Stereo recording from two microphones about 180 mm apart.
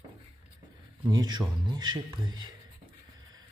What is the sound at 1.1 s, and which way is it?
A man's voice, 20° right (ahead or behind).